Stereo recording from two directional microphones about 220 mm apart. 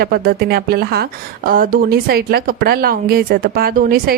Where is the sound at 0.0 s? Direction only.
45° right (ahead or behind).